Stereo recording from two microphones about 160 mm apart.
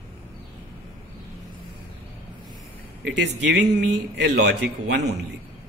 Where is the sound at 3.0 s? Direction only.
90° right.